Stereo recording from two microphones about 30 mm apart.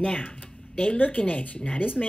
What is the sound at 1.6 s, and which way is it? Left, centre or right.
Speech, left.